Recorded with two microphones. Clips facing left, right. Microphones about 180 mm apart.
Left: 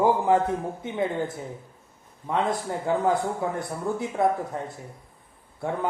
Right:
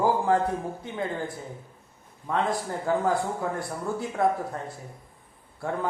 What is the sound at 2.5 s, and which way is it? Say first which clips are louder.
Speech: left 1 dB; 20° left (ahead or behind).